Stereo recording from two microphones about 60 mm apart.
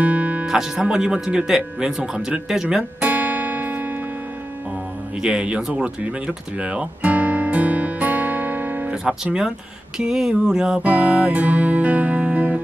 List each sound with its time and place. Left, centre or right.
0.0 s music: right
0.5 s speech: centre
3.0 s music: right
5.2 s speech: centre
8.9 s speech: centre
10.8 s music: right